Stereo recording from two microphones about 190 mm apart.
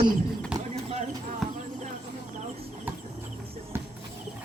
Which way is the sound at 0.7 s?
35° right (ahead or behind).